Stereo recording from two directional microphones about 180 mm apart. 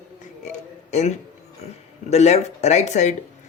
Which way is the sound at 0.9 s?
40° left (ahead or behind).